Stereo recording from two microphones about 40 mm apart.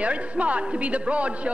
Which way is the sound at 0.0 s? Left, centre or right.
Right.